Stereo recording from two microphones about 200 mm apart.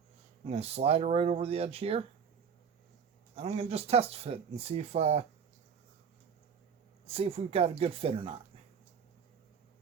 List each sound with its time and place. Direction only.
0.4 s speech: 30° right (ahead or behind)
3.3 s speech: 30° right (ahead or behind)
7.1 s speech: 30° right (ahead or behind)